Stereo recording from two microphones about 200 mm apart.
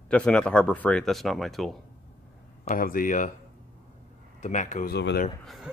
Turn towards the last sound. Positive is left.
turn(degrees=55)  # may be behind; listen again after turning